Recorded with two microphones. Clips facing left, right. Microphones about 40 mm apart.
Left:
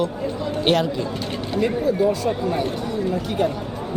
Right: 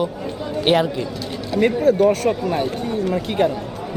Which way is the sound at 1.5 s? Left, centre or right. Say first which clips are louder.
Right 5 dB; right.